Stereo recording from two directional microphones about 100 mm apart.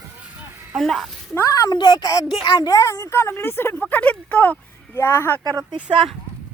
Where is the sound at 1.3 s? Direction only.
35° left (ahead or behind).